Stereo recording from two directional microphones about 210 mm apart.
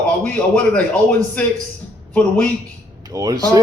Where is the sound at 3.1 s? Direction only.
15° right (ahead or behind).